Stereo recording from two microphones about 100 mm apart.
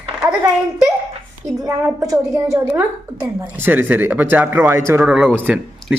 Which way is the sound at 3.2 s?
20° right (ahead or behind).